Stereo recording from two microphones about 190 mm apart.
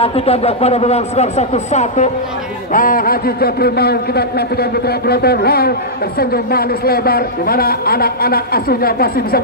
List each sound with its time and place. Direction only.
0.0 s speech: 30° left (ahead or behind)
2.7 s a man's voice: 45° left (ahead or behind)